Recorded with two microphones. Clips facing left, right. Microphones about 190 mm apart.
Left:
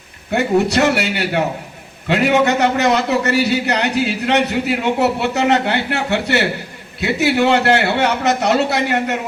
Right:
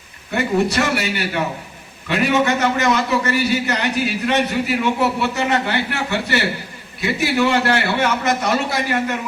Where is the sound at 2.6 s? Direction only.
65° left (ahead or behind).